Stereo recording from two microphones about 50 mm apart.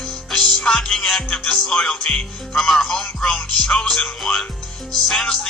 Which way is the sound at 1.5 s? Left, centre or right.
Centre.